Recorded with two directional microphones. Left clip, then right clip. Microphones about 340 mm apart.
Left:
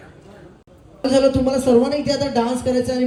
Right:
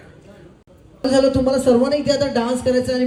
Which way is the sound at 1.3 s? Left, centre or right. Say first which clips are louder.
Right 1 dB; centre.